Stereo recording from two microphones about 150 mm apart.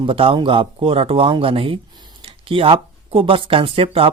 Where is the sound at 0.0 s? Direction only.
35° right (ahead or behind).